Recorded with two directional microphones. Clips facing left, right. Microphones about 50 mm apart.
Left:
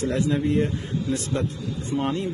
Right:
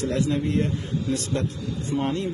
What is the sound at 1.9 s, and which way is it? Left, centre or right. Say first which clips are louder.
Speech: even; centre.